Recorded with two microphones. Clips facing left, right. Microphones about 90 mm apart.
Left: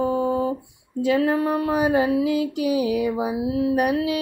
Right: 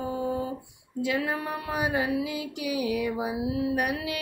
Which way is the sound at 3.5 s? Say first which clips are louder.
Left 8 dB; 45° left (ahead or behind).